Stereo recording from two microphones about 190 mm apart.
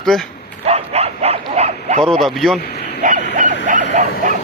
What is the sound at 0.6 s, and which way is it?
Bow-wow, 35° right (ahead or behind).